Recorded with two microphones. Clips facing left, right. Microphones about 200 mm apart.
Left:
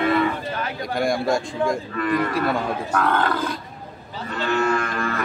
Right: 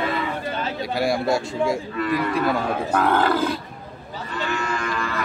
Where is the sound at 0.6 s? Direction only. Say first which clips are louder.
Right 1 dB; 25° right (ahead or behind).